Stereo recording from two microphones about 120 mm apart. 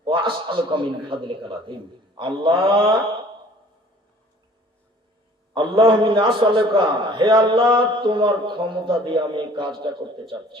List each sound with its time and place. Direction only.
0.0 s a man's voice: 45° right (ahead or behind)
5.5 s a man's voice: 45° right (ahead or behind)